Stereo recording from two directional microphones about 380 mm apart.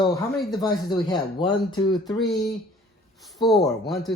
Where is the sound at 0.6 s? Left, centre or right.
Centre.